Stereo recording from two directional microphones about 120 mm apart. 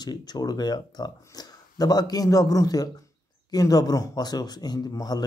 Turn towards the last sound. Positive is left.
turn(degrees=35)  # may be behind; listen again after turning